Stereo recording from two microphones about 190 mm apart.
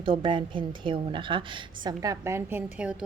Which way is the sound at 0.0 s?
25° right (ahead or behind).